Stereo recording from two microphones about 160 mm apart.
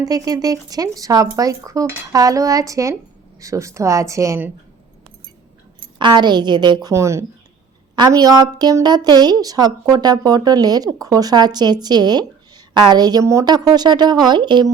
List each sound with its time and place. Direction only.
0.0 s speech: 25° right (ahead or behind)
5.8 s speech: 30° right (ahead or behind)